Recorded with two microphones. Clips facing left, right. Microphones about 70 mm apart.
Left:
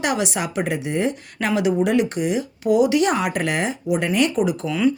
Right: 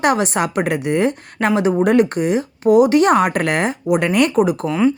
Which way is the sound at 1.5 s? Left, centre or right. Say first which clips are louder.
Right 3 dB; right.